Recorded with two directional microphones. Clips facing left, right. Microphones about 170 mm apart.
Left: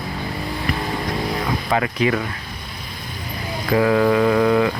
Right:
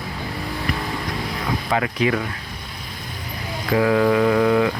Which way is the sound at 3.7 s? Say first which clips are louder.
Left 1 dB; 40° left (ahead or behind).